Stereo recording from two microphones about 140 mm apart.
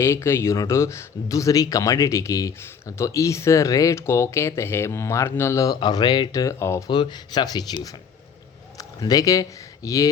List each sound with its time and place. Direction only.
0.0 s speech: 20° left (ahead or behind)
6.9 s speech: 30° left (ahead or behind)